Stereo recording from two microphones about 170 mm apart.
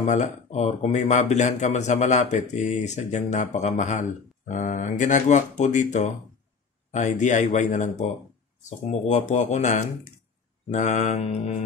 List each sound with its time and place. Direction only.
0.0 s speech: 45° left (ahead or behind)